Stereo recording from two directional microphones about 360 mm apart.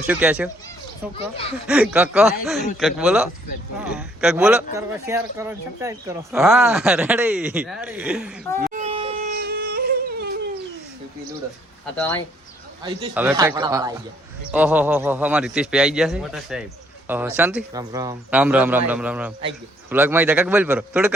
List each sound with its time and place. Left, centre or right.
0.1 s a man's voice: centre
1.1 s speech: centre
1.6 s a man's voice: centre
8.6 s crying: centre
11.9 s a man's voice: centre
12.8 s a man's voice: centre